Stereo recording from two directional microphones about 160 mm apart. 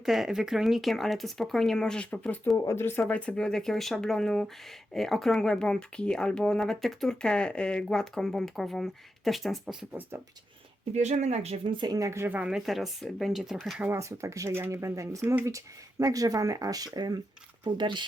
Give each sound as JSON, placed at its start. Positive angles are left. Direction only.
{"t": 0.0, "sound": "speech", "side_deg": 0}
{"t": 10.9, "sound": "speech", "side_deg": -45}
{"t": 13.8, "sound": "speech", "side_deg": -15}